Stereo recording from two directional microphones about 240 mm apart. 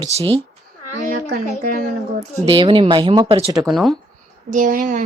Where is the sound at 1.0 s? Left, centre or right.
Right.